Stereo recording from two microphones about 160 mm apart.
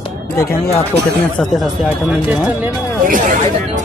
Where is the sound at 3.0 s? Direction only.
55° right (ahead or behind).